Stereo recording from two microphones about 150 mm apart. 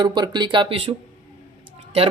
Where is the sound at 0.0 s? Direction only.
30° right (ahead or behind).